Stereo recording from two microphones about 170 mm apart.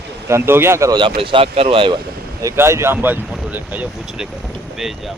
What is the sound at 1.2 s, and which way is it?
Speech, 30° right (ahead or behind).